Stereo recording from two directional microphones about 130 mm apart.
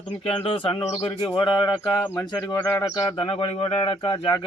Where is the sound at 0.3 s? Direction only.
45° left (ahead or behind).